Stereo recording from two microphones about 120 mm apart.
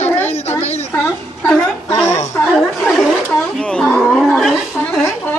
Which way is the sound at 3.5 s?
5° left (ahead or behind).